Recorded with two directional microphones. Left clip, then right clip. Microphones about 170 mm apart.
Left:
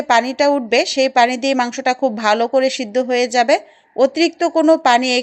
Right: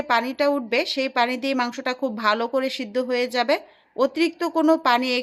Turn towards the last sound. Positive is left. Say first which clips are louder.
# left 6 dB
turn(degrees=20)  # may be behind; listen again after turning